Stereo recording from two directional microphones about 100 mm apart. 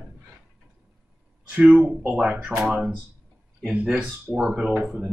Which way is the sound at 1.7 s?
15° right (ahead or behind).